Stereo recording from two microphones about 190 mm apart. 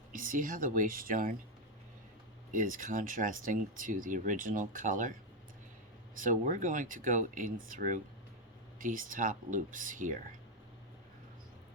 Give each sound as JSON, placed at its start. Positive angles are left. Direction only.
{"t": 0.1, "sound": "speech", "side_deg": -45}
{"t": 2.5, "sound": "speech", "side_deg": -45}
{"t": 6.1, "sound": "speech", "side_deg": -45}